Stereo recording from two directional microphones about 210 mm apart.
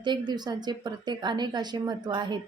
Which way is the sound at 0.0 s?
20° right (ahead or behind).